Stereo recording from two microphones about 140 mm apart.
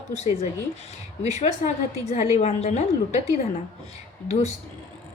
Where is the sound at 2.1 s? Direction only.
50° left (ahead or behind).